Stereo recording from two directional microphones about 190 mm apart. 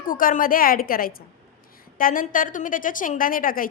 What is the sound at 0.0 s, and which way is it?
A woman's voice, 45° left (ahead or behind).